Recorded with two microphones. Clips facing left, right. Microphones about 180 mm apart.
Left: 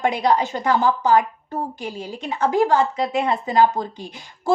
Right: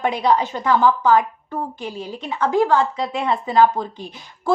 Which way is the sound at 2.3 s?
45° left (ahead or behind).